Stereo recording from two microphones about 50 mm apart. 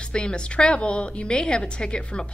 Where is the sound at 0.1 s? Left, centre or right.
Centre.